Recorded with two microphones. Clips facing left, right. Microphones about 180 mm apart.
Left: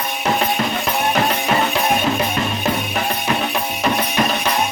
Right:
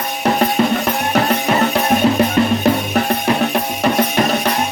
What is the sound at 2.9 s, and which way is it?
Music, 45° right (ahead or behind).